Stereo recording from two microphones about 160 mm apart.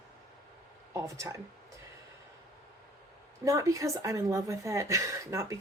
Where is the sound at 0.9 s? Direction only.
20° right (ahead or behind).